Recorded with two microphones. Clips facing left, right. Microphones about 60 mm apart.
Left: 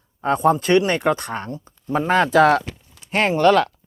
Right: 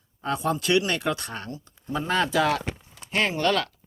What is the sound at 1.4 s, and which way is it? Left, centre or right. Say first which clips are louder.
Speech: left 6 dB; left.